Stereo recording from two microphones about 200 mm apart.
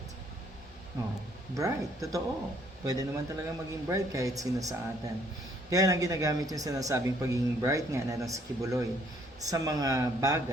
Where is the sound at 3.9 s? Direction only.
15° right (ahead or behind).